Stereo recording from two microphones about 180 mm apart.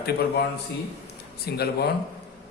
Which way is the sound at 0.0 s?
60° left (ahead or behind).